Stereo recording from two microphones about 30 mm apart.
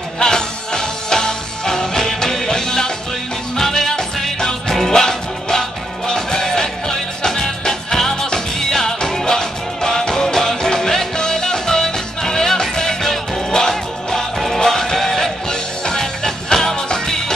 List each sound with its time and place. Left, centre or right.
0.2 s music: left